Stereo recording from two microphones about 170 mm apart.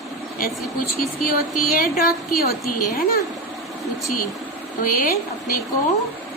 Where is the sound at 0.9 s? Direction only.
60° left (ahead or behind).